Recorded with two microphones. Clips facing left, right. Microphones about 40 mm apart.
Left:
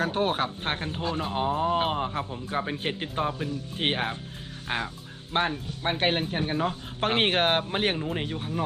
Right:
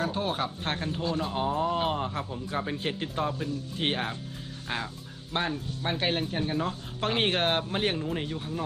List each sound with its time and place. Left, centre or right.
0.0 s speech: left; by 8.6 s centre